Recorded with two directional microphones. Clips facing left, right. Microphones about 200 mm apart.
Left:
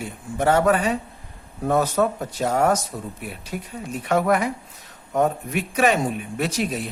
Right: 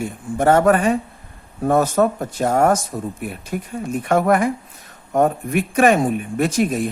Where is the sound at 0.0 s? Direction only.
50° right (ahead or behind).